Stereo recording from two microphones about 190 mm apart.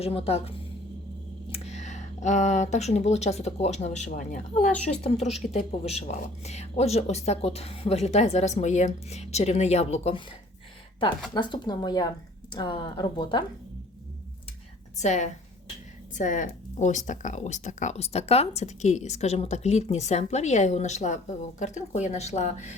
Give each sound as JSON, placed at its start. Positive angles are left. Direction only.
{"t": 0.0, "sound": "speech", "side_deg": 30}
{"t": 5.5, "sound": "speech", "side_deg": 35}
{"t": 11.3, "sound": "speech", "side_deg": 25}
{"t": 14.9, "sound": "speech", "side_deg": 40}